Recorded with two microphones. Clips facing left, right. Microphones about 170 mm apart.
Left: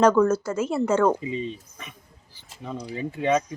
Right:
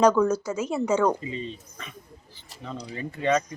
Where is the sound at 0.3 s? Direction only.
10° right (ahead or behind).